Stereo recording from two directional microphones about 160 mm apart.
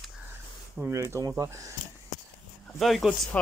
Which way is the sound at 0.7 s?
15° right (ahead or behind).